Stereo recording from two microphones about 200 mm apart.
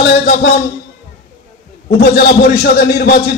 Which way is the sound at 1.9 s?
50° left (ahead or behind).